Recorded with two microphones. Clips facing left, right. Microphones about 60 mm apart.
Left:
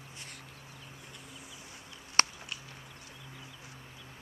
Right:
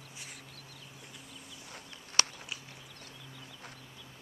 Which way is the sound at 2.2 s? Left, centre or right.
Left.